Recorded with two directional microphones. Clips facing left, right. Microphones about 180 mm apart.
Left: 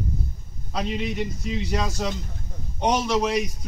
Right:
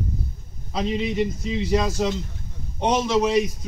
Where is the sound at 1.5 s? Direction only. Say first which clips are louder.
Right 2 dB; 10° right (ahead or behind).